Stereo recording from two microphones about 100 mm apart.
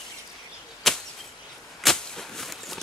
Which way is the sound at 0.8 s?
5° left (ahead or behind).